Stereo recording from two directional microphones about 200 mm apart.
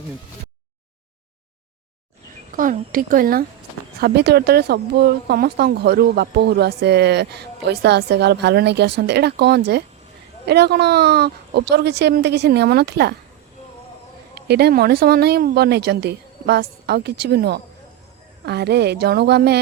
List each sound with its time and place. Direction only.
2.6 s speech: 45° right (ahead or behind)
14.3 s speech: 55° right (ahead or behind)